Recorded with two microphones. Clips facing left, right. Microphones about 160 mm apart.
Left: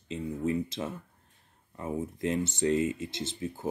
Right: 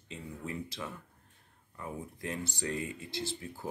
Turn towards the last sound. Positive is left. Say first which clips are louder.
# left 4 dB
turn(degrees=20)  # may be behind; listen again after turning